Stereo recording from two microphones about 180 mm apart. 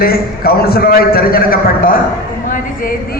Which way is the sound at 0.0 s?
55° left (ahead or behind).